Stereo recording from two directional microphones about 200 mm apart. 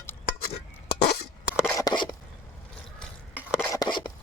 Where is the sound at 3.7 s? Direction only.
20° left (ahead or behind).